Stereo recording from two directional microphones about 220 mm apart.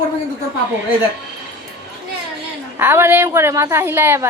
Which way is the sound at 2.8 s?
10° right (ahead or behind).